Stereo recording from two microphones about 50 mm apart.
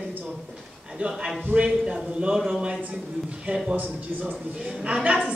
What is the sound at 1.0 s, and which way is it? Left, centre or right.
Speech, right.